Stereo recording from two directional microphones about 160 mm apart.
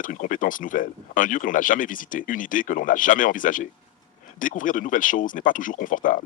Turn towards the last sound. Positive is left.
turn(degrees=55)  # may be behind; listen again after turning